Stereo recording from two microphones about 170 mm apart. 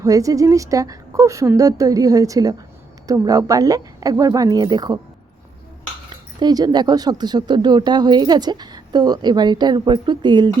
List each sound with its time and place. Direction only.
0.0 s speech: 20° right (ahead or behind)
6.1 s speech: 25° right (ahead or behind)